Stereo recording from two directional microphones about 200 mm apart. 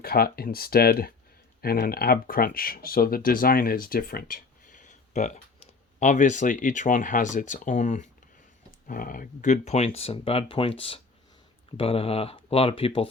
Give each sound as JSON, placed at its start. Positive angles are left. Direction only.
{"t": 0.0, "sound": "speech", "side_deg": 50}